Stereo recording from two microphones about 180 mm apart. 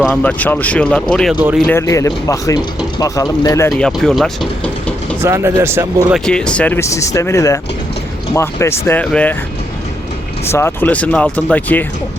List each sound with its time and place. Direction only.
0.0 s speech: 5° left (ahead or behind)
1.6 s speech: 15° left (ahead or behind)
3.7 s speech: 5° left (ahead or behind)
5.2 s speech: 15° right (ahead or behind)
6.1 s speech: 5° left (ahead or behind)
10.4 s speech: 15° left (ahead or behind)